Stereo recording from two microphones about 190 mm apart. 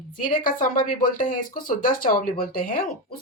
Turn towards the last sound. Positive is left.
turn(degrees=50)  # may be behind; listen again after turning